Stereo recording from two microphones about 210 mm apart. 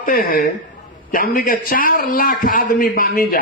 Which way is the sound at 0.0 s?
45° left (ahead or behind).